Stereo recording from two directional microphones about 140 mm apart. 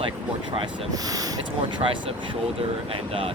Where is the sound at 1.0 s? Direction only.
25° right (ahead or behind).